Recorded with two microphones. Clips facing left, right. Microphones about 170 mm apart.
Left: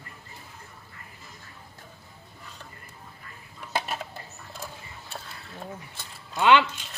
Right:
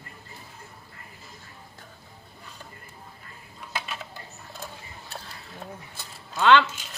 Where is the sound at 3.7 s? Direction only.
45° left (ahead or behind).